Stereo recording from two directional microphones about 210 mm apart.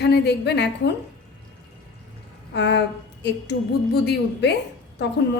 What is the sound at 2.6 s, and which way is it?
A woman's voice, 55° left (ahead or behind).